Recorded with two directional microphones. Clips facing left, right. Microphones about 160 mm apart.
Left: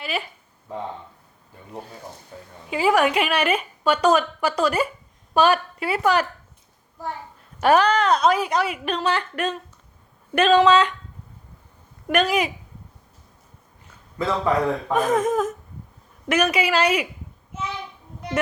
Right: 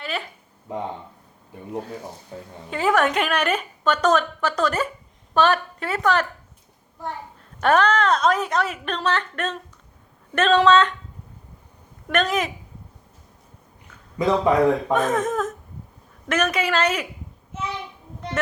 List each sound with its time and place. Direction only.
2.6 s a woman's voice: 5° left (ahead or behind)
7.6 s a woman's voice: 5° left (ahead or behind)
12.0 s a woman's voice: 10° left (ahead or behind)
14.2 s a man's voice: 15° right (ahead or behind)
14.9 s a woman's voice: 10° left (ahead or behind)